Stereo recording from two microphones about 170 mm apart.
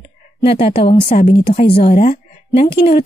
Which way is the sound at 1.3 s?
30° left (ahead or behind).